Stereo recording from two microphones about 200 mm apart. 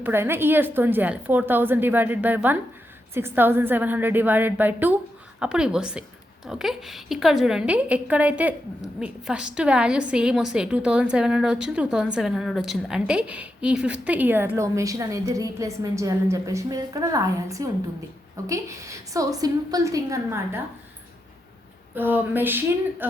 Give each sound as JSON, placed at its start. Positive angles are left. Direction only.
{"t": 0.0, "sound": "a woman's voice", "side_deg": -10}
{"t": 21.9, "sound": "a woman's voice", "side_deg": -10}